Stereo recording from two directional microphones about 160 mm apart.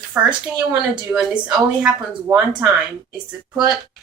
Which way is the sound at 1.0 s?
5° right (ahead or behind).